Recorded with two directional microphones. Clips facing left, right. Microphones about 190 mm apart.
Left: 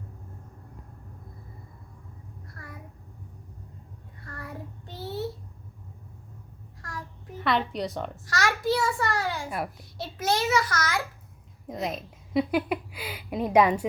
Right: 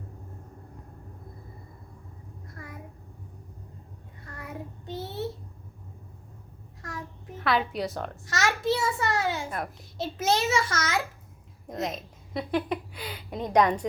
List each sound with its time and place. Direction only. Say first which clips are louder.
4.4 s child singing: right 1 dB; 20° right (ahead or behind)
7.3 s a woman's voice: even; centre (ahead or behind)
8.3 s a sound: even; 25° right (ahead or behind)
10.0 s a child's voice: right 1 dB; 25° right (ahead or behind)
11.7 s speech: even; centre (ahead or behind)